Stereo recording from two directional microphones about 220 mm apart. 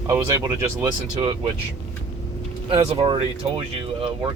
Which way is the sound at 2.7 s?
25° right (ahead or behind).